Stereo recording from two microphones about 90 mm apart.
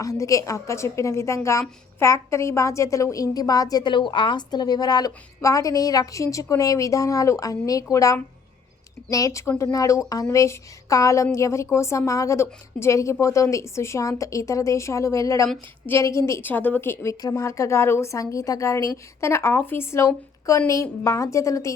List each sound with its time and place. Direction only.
0.0 s a woman's voice: 40° left (ahead or behind)
3.9 s a woman's voice: 65° left (ahead or behind); by 16.4 s 35° left (ahead or behind)
16.4 s a woman's voice: 20° left (ahead or behind); by 21.7 s 35° left (ahead or behind)